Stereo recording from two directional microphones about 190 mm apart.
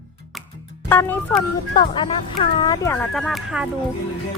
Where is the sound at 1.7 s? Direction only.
25° left (ahead or behind).